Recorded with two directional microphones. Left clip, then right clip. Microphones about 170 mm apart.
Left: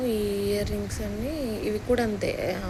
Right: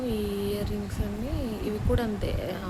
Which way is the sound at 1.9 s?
15° left (ahead or behind).